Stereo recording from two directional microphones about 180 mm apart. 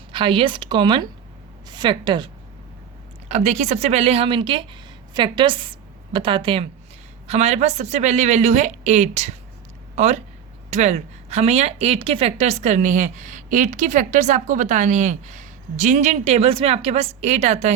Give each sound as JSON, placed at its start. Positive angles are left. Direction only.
{"t": 0.1, "sound": "a woman's voice", "side_deg": -30}
{"t": 3.2, "sound": "a woman's voice", "side_deg": -40}